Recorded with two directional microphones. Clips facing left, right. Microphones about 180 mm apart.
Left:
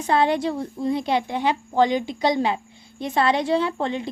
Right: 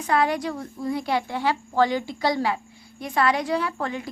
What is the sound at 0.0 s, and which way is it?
A woman's voice, 25° left (ahead or behind).